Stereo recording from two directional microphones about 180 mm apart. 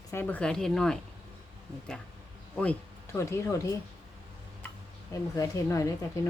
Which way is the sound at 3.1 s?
15° left (ahead or behind).